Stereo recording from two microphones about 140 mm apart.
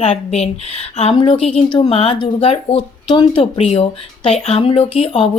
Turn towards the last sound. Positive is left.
turn(degrees=40)  # may be behind; listen again after turning